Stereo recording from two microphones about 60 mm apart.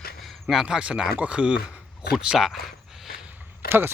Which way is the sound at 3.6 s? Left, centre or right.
Right.